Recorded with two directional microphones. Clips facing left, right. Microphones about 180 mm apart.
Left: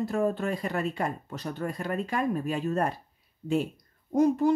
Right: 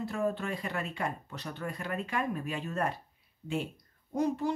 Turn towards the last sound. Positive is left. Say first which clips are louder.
# left 7 dB
turn(degrees=45)  # may be behind; listen again after turning